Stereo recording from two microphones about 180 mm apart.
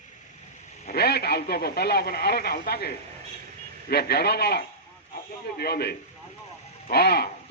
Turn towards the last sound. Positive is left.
turn(degrees=60)  # may be behind; listen again after turning